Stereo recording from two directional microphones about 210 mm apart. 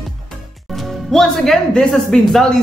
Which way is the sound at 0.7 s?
Centre (ahead or behind).